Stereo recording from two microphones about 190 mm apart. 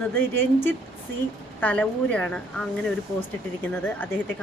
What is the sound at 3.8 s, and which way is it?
Speech, 10° left (ahead or behind).